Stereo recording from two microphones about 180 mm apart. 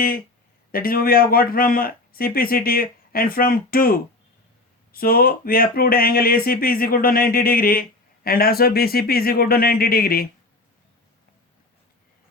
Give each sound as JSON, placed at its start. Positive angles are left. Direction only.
{"t": 0.7, "sound": "speech", "side_deg": 55}